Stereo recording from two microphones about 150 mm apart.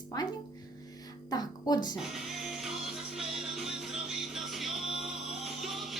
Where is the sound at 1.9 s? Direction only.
Centre (ahead or behind).